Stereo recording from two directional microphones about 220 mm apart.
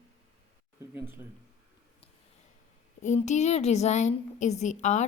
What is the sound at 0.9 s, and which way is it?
Speech, 10° right (ahead or behind).